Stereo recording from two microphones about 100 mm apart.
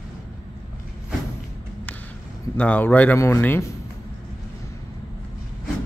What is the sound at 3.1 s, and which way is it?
Speech, 30° left (ahead or behind).